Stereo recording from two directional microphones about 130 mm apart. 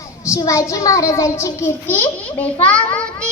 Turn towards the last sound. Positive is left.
turn(degrees=10)  # may be behind; listen again after turning